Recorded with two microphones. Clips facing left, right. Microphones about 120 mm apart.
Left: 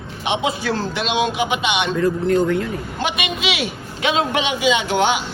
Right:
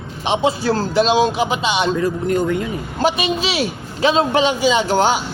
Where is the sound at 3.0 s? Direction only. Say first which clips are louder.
Right 6 dB; 35° right (ahead or behind).